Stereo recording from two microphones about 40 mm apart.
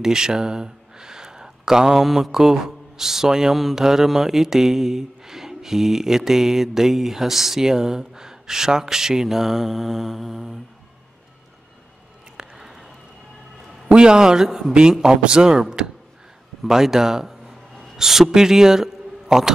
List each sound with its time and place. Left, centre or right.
0.0 s speech: centre
12.4 s a sound: centre
13.9 s a man's voice: centre